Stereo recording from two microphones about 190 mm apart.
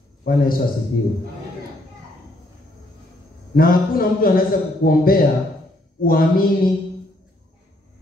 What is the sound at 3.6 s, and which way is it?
A man's voice, 50° left (ahead or behind).